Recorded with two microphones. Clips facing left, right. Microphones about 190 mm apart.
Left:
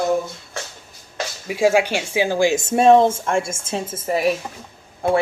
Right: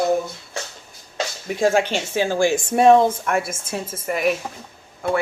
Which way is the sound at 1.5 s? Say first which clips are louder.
Left 2 dB; 10° left (ahead or behind).